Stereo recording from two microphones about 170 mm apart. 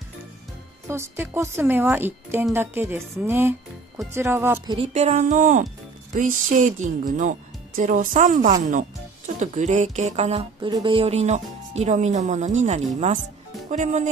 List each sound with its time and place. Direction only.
0.8 s a woman's voice: 15° right (ahead or behind)
4.9 s speech: 40° right (ahead or behind)
10.7 s speech: 25° right (ahead or behind); by 14.1 s 45° right (ahead or behind)